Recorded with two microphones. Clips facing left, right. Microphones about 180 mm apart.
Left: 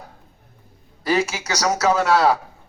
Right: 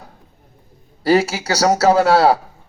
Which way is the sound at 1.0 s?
35° right (ahead or behind).